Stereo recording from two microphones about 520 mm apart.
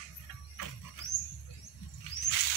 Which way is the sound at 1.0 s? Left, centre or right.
Left.